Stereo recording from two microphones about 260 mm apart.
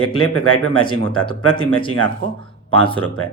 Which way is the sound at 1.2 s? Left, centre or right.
Centre.